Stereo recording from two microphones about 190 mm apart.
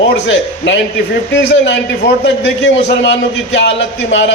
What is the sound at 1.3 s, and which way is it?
A man's voice, 65° left (ahead or behind).